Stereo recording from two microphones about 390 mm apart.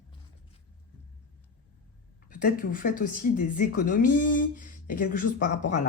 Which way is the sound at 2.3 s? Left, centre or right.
Left.